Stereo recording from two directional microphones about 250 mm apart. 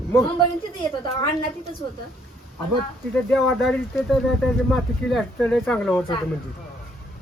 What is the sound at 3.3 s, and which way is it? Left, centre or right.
Speech, centre.